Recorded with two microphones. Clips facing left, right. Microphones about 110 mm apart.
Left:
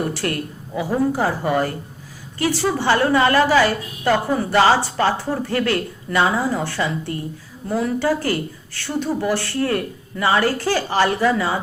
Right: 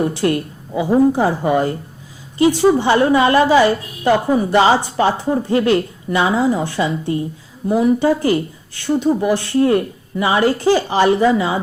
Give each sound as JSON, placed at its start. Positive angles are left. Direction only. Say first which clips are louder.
{"t": 0.0, "sound": "a woman's voice", "louder": "right 6 dB", "side_deg": -20}